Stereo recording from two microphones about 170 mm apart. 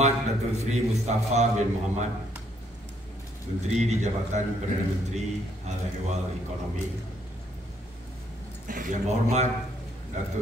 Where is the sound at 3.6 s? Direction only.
45° right (ahead or behind).